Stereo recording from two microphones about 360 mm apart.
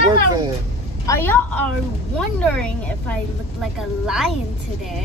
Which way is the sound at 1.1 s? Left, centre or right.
Centre.